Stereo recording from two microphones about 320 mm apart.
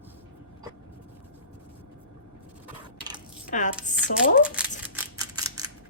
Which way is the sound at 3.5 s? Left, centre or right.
Left.